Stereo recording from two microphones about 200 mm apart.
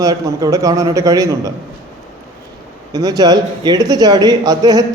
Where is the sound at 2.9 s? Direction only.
20° right (ahead or behind).